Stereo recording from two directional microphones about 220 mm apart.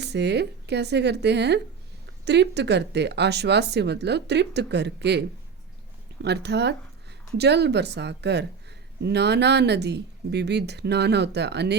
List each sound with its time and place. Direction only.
0.0 s speech: 50° right (ahead or behind)
6.2 s speech: 50° right (ahead or behind)